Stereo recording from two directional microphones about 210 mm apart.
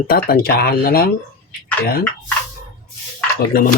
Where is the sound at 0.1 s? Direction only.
45° left (ahead or behind).